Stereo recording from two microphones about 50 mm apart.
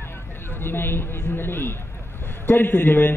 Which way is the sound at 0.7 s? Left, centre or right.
Left.